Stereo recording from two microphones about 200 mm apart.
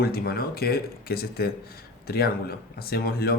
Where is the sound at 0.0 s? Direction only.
50° left (ahead or behind).